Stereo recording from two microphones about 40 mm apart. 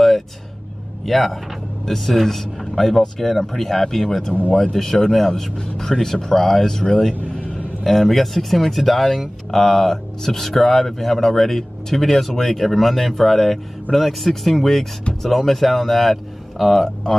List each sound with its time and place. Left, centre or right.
1.0 s speech: centre
4.5 s speech: left
4.7 s speech: centre
7.8 s speech: centre